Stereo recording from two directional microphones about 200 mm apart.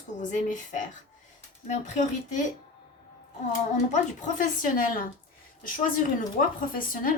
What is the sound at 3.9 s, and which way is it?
Speech, 40° left (ahead or behind).